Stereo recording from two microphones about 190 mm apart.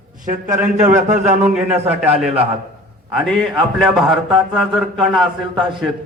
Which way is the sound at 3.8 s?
Centre (ahead or behind).